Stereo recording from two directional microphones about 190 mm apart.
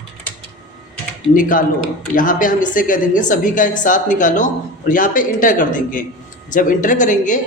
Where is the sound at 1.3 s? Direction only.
45° left (ahead or behind).